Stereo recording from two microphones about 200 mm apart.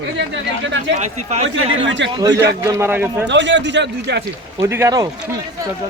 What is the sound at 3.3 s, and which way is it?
Speech, 65° right (ahead or behind).